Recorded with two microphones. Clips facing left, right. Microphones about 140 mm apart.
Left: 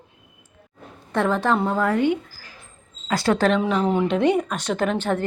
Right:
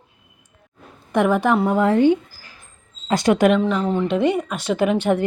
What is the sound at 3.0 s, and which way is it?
Speech, 20° right (ahead or behind).